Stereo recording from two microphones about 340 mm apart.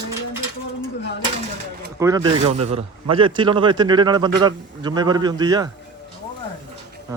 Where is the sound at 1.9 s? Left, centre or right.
Centre.